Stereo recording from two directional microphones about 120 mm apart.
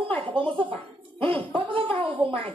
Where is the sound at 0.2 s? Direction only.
45° right (ahead or behind).